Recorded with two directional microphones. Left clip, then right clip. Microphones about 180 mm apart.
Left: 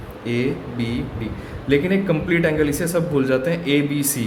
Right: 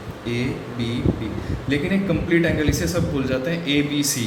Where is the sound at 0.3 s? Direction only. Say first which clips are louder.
Left 3 dB; 65° left (ahead or behind).